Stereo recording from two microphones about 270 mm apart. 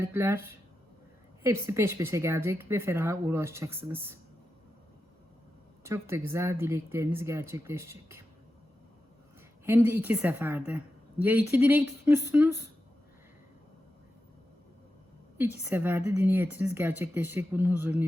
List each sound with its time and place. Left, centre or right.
0.0 s speech: centre
5.8 s speech: centre
9.6 s speech: centre
15.4 s speech: centre